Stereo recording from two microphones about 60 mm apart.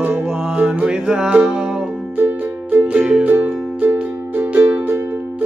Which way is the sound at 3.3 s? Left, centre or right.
Right.